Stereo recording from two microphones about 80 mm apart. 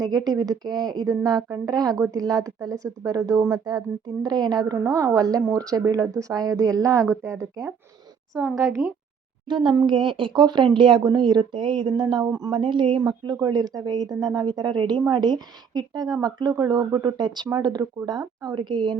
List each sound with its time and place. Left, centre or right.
0.0 s speech: right
9.5 s speech: right
10.8 s speech: right
11.0 s speech: right
12.5 s speech: right
13.0 s speech: right
17.5 s speech: right